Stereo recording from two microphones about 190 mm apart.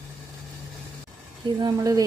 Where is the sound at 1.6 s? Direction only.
20° right (ahead or behind).